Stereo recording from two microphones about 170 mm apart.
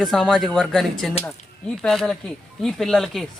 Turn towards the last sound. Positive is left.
turn(degrees=0)  # may be behind; listen again after turning